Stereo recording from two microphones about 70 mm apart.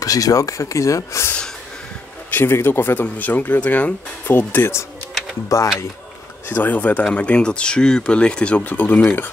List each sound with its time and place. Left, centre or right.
0.0 s speech: left
2.3 s speech: left
5.5 s speech: left
6.5 s speech: left